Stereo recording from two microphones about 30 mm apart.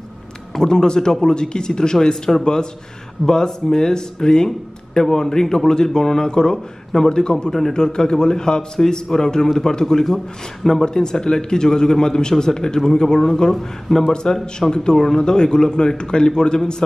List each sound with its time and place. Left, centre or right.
0.6 s a man's voice: left
10.9 s a man's voice: left
14.1 s a man's voice: left
15.0 s a man's voice: centre
15.2 s a man's voice: left